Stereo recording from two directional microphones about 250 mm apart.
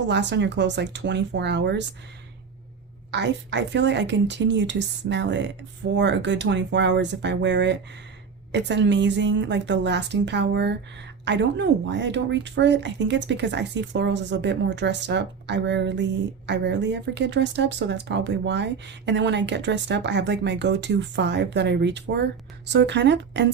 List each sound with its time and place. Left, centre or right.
0.1 s speech: right
3.1 s speech: right